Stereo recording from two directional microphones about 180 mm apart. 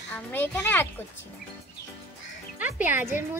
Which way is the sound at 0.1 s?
10° left (ahead or behind).